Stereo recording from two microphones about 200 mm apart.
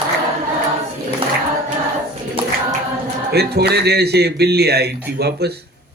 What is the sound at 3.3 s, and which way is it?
A man's voice, 55° right (ahead or behind).